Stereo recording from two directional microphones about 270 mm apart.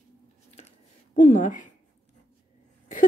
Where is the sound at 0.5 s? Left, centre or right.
Left.